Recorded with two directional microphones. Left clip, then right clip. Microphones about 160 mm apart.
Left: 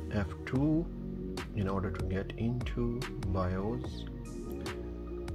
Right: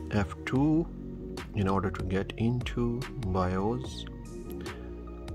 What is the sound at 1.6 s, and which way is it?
Speech, 50° right (ahead or behind).